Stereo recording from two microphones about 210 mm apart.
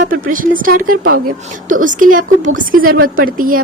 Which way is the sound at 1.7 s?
40° right (ahead or behind).